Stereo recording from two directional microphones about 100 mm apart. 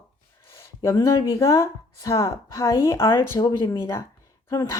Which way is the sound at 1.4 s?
30° left (ahead or behind).